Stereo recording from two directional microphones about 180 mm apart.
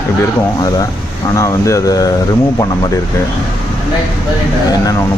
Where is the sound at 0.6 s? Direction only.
20° left (ahead or behind).